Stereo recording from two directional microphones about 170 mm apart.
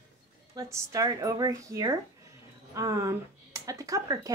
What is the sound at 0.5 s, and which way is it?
A woman's voice, 20° right (ahead or behind).